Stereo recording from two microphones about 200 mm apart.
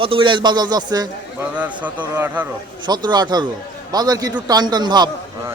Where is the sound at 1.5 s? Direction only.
5° right (ahead or behind).